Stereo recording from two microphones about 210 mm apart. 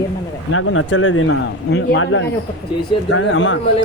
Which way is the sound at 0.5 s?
80° left.